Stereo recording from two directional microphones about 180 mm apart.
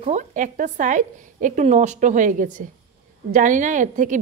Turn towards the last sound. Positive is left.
turn(degrees=-45)  # may be behind; listen again after turning